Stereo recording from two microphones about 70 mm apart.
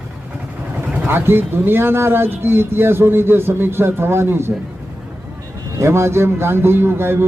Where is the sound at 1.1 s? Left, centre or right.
Right.